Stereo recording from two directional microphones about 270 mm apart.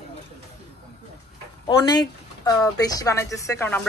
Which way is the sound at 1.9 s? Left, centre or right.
Centre.